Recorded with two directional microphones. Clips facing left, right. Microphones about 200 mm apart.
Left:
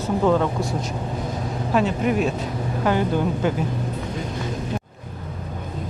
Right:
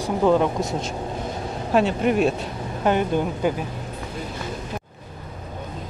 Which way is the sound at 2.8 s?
20° right (ahead or behind).